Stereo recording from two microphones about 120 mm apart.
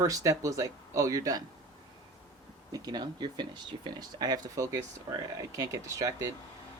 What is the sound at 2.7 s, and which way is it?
Speech, 35° right (ahead or behind).